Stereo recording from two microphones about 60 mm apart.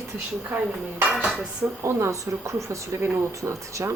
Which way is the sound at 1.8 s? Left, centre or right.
Right.